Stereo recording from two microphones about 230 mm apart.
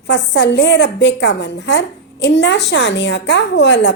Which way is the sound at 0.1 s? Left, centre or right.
Left.